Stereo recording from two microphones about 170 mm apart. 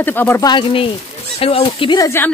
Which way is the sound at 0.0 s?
10° left (ahead or behind).